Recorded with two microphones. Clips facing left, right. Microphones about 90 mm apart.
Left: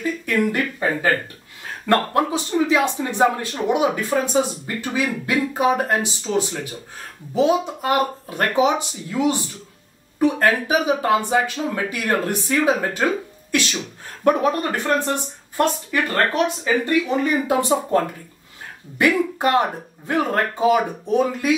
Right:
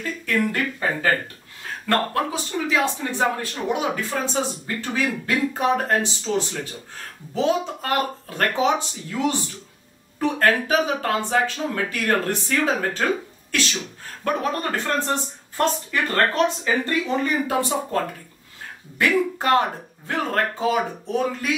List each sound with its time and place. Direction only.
0.0 s speech: 15° left (ahead or behind)
1.9 s speech: 20° left (ahead or behind)
19.3 s speech: 15° left (ahead or behind)